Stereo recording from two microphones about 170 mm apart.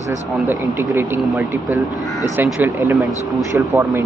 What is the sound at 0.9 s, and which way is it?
Speech, 15° right (ahead or behind).